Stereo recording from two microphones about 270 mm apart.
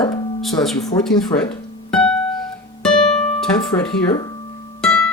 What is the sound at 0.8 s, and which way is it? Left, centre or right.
Speech, centre.